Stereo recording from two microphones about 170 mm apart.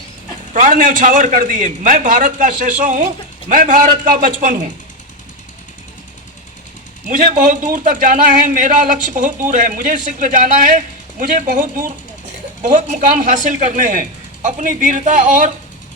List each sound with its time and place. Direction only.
0.5 s a man's voice: 50° right (ahead or behind)
7.1 s a man's voice: 50° right (ahead or behind)